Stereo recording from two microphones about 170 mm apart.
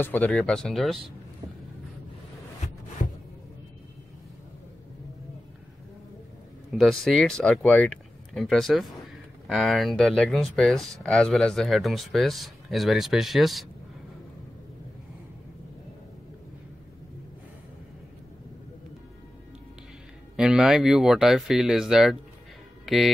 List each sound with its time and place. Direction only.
0.0 s speech: 10° left (ahead or behind)
3.0 s a sound: 45° left (ahead or behind)
6.7 s speech: centre (ahead or behind)
20.3 s speech: 5° right (ahead or behind)